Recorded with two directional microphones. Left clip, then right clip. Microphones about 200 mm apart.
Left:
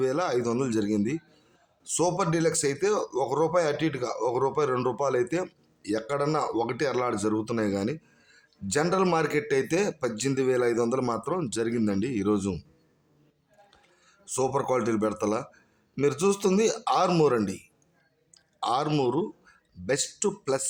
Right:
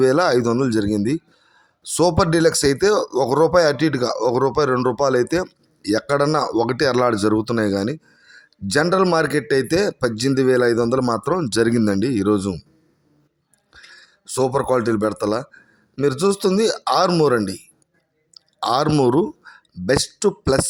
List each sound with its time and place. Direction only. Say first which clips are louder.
0.0 s a man's voice: right 10 dB; 35° right (ahead or behind)
13.8 s speech: right 9 dB; 25° right (ahead or behind)
17.1 s speech: right 6 dB; 15° right (ahead or behind)
18.3 s speech: right 8 dB; 30° right (ahead or behind)